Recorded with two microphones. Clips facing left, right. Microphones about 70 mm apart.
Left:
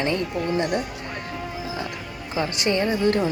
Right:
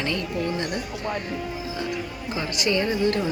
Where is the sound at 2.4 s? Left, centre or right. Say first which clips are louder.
Left 2 dB; left.